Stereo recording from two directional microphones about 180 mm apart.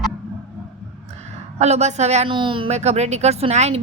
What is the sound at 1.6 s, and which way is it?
Speech, 40° right (ahead or behind).